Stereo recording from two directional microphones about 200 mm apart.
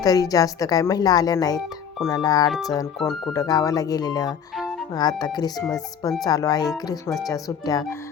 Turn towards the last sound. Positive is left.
turn(degrees=20)  # may be behind; listen again after turning